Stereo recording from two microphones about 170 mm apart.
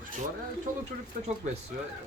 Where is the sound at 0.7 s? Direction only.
50° right (ahead or behind).